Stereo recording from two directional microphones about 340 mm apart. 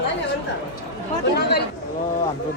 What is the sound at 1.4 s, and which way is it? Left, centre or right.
Speech, left.